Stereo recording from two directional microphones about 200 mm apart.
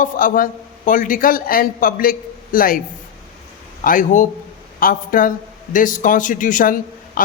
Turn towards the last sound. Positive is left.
turn(degrees=45)  # may be behind; listen again after turning